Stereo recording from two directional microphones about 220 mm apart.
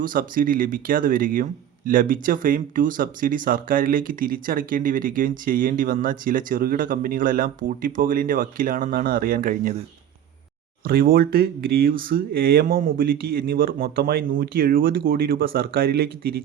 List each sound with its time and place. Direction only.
0.0 s speech: 40° right (ahead or behind)
10.8 s speech: 45° right (ahead or behind)